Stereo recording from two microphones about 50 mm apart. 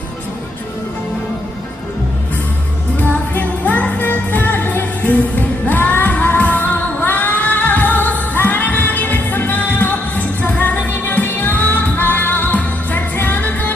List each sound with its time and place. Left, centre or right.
3.0 s music: left